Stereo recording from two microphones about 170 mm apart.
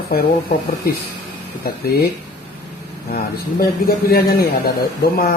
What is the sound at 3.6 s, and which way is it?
Speech, 65° left (ahead or behind).